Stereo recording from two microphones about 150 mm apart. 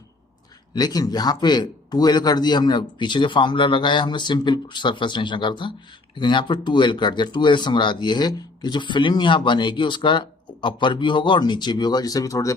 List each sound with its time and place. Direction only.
0.7 s speech: 25° left (ahead or behind)